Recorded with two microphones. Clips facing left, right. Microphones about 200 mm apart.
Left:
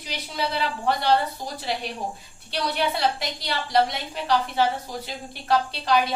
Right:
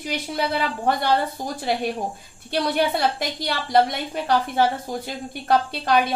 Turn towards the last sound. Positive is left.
turn(degrees=-55)  # may be behind; listen again after turning